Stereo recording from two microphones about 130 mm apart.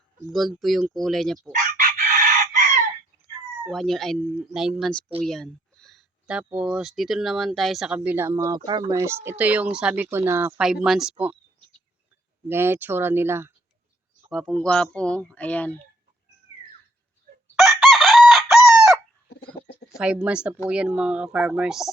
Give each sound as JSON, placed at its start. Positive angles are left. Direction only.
{"t": 0.3, "sound": "speech", "side_deg": 0}
{"t": 1.5, "sound": "chicken", "side_deg": -90}
{"t": 3.7, "sound": "speech", "side_deg": 0}
{"t": 7.9, "sound": "speech", "side_deg": -15}
{"t": 8.9, "sound": "speech", "side_deg": -20}
{"t": 10.6, "sound": "speech", "side_deg": -5}
{"t": 12.5, "sound": "speech", "side_deg": -20}
{"t": 14.3, "sound": "speech", "side_deg": 0}
{"t": 17.6, "sound": "chicken", "side_deg": 0}
{"t": 20.0, "sound": "speech", "side_deg": -10}